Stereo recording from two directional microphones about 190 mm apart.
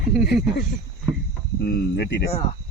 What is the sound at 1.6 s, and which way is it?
Speech, 60° left (ahead or behind).